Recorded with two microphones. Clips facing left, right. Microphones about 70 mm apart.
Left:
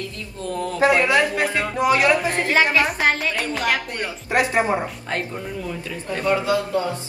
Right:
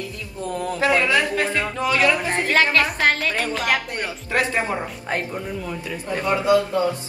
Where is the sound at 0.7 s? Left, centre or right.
Left.